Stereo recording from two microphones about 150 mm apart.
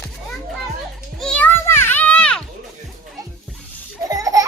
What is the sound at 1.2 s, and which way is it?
Children playing, 5° left (ahead or behind).